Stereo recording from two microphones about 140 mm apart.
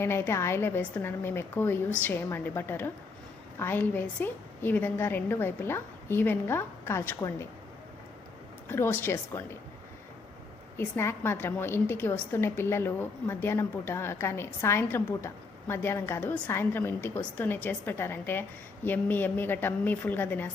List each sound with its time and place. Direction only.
0.0 s a woman's voice: 20° left (ahead or behind)
8.7 s a woman's voice: 15° left (ahead or behind)
10.8 s a woman's voice: 15° left (ahead or behind)